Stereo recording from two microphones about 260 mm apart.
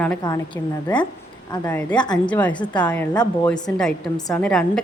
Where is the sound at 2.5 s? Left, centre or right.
Centre.